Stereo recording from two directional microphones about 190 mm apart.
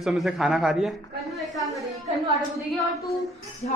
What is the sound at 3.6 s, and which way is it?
Speech, 40° left (ahead or behind).